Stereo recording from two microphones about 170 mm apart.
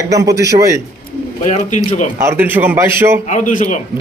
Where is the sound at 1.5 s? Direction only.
45° left (ahead or behind).